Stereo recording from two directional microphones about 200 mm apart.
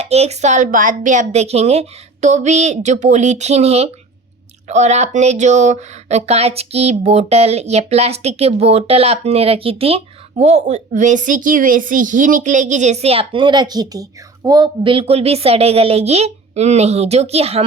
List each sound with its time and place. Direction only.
0.0 s speech: 30° right (ahead or behind)